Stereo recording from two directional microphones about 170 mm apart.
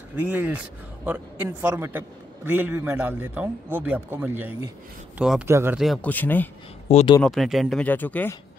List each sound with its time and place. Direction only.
0.1 s a man's voice: 10° right (ahead or behind)
6.0 s speech: 10° left (ahead or behind)
6.9 s speech: 40° left (ahead or behind)
7.2 s speech: centre (ahead or behind)